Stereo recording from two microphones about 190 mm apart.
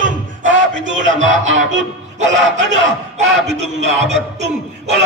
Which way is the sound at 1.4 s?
85° right.